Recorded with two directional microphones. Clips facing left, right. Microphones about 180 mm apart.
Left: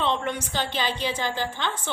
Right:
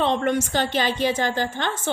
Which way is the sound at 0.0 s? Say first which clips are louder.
Right 5 dB; 45° right (ahead or behind).